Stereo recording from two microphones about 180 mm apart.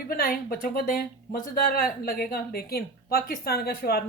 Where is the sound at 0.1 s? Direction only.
55° left (ahead or behind).